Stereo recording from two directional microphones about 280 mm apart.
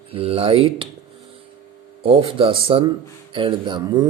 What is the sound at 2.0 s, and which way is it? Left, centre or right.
Speech, centre.